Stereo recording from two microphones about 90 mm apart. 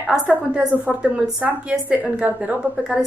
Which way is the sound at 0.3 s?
15° right (ahead or behind).